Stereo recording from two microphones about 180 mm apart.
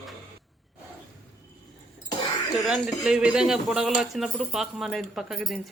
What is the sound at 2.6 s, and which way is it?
Speech, 5° right (ahead or behind).